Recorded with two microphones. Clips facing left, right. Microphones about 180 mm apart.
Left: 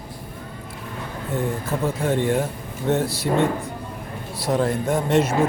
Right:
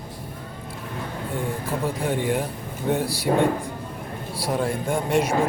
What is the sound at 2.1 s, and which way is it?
A man's voice, 5° right (ahead or behind).